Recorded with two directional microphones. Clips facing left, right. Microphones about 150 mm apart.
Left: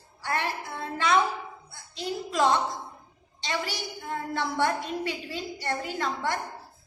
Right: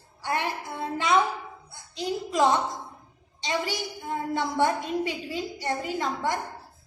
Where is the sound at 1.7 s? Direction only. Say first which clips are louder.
Right 4 dB; 20° right (ahead or behind).